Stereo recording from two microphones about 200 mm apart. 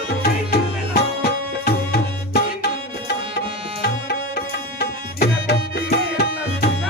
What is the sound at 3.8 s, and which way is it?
Music, 55° left (ahead or behind).